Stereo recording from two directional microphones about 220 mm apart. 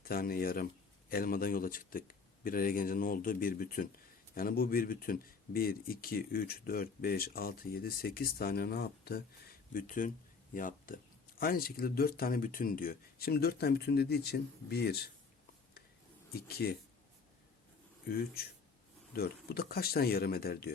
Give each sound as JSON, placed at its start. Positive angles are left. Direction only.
{"t": 0.0, "sound": "speech", "side_deg": 40}
{"t": 16.3, "sound": "speech", "side_deg": 45}
{"t": 18.0, "sound": "speech", "side_deg": 45}